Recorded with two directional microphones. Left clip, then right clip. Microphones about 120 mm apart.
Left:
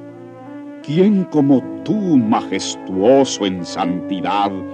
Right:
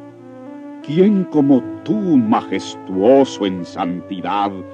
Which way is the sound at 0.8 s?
25° left (ahead or behind).